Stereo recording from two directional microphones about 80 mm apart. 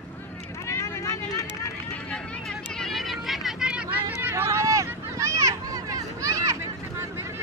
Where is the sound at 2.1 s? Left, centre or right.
Centre.